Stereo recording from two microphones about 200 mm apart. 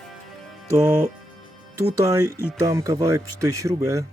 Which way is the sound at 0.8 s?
10° right (ahead or behind).